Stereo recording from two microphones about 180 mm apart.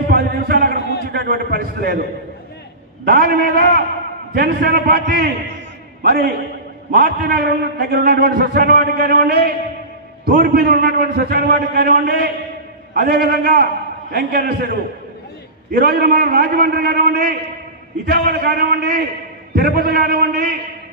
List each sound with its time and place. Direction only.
0.1 s a sound: 60° right (ahead or behind)
1.1 s a man's voice: 60° right (ahead or behind)
3.1 s a man's voice: 60° right (ahead or behind)
15.7 s a man's voice: 55° right (ahead or behind)